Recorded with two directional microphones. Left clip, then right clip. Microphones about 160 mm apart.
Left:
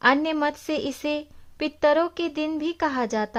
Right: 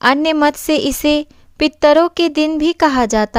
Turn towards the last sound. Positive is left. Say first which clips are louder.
# right 11 dB
turn(degrees=-35)  # may be behind; listen again after turning